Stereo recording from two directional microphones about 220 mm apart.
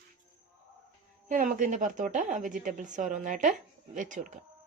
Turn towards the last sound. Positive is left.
turn(degrees=-35)  # may be behind; listen again after turning